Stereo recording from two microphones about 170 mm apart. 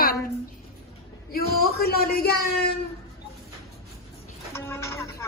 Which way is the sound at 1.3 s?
60° left (ahead or behind).